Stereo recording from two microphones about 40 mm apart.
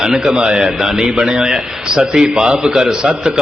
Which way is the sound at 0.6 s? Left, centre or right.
Centre.